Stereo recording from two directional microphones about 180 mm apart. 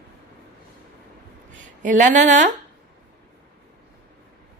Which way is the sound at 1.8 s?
45° right (ahead or behind).